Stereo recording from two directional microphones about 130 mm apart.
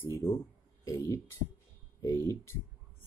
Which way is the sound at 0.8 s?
25° left (ahead or behind).